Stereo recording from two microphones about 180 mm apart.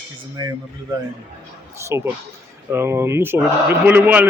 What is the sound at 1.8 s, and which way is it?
Speech, 15° right (ahead or behind).